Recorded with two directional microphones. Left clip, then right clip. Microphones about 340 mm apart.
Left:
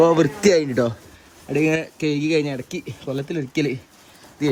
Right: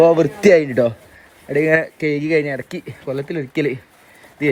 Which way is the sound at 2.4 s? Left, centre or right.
Centre.